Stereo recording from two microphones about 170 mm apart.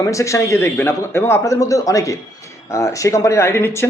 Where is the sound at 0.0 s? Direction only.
20° left (ahead or behind).